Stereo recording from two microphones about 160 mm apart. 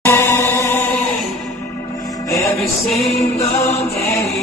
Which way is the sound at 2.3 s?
20° left (ahead or behind).